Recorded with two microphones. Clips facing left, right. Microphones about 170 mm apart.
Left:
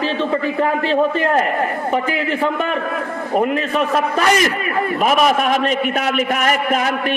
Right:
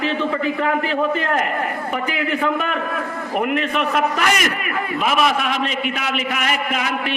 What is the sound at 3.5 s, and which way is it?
Speech, 30° left (ahead or behind).